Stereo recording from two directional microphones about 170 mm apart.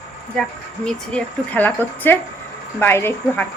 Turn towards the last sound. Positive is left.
turn(degrees=15)  # may be behind; listen again after turning